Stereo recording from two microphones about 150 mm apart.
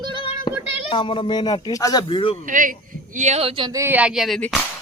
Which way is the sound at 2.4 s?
65° right (ahead or behind).